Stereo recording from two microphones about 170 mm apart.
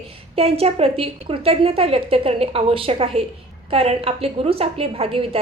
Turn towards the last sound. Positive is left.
turn(degrees=-35)  # may be behind; listen again after turning